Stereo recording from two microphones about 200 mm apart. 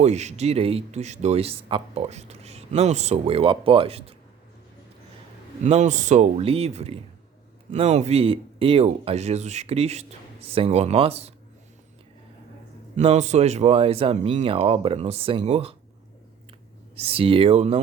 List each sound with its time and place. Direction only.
0.0 s speech: 35° right (ahead or behind)
5.6 s speech: 35° right (ahead or behind)
13.0 s speech: 30° right (ahead or behind)
16.9 s speech: 30° right (ahead or behind)